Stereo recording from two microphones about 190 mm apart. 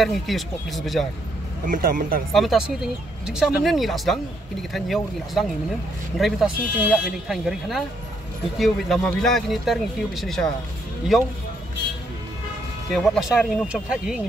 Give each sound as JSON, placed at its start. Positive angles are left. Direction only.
{"t": 0.0, "sound": "speech", "side_deg": 0}
{"t": 1.7, "sound": "speech", "side_deg": -45}
{"t": 2.3, "sound": "speech", "side_deg": 0}
{"t": 12.9, "sound": "speech", "side_deg": 0}